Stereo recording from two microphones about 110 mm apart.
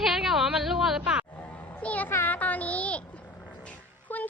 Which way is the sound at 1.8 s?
15° left (ahead or behind).